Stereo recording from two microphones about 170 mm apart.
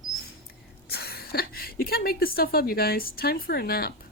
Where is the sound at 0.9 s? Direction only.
70° left (ahead or behind).